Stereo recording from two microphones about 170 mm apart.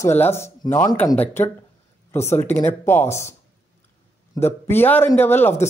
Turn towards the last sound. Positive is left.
turn(degrees=10)  # may be behind; listen again after turning